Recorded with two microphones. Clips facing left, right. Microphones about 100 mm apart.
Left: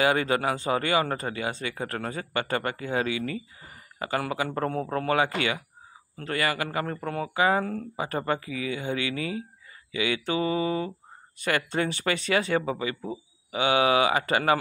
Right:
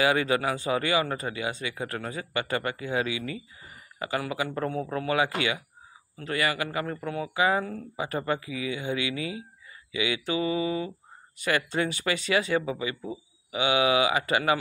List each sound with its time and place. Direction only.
0.0 s speech: 40° left (ahead or behind)
13.0 s a sound: 30° left (ahead or behind)
13.6 s speech: 40° left (ahead or behind)